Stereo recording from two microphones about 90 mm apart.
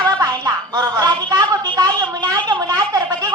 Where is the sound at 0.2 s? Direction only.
45° right (ahead or behind).